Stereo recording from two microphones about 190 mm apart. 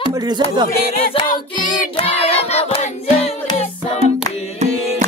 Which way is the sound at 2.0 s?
30° left (ahead or behind).